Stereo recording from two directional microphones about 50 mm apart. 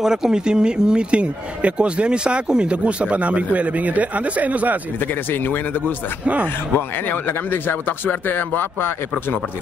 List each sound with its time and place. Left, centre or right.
0.0 s speech: centre; by 4.7 s right
5.3 s speech: left
6.2 s speech: right
7.1 s speech: left